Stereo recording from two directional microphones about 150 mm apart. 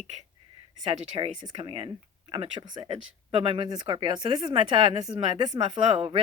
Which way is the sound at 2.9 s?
40° right (ahead or behind).